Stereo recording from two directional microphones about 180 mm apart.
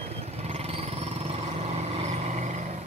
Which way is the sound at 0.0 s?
35° right (ahead or behind).